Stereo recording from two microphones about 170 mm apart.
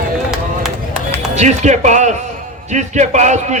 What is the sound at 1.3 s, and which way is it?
A man's voice, 45° right (ahead or behind).